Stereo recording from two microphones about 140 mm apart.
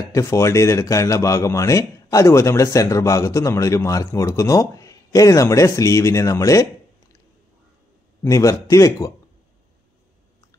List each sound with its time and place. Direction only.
0.1 s speech: 20° left (ahead or behind)
8.2 s speech: 20° left (ahead or behind)